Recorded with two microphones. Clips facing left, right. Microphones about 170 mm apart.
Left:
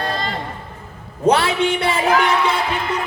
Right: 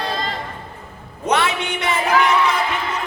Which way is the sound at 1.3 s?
30° left (ahead or behind).